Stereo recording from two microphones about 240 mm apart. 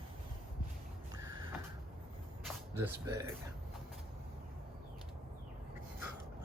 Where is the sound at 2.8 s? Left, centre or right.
Centre.